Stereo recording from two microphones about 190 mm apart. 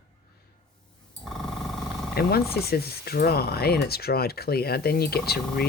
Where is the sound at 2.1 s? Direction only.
55° left (ahead or behind).